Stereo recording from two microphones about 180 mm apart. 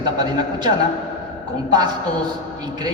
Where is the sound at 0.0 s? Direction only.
25° right (ahead or behind).